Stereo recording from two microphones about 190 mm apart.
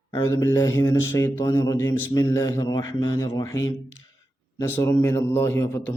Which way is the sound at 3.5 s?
90° left.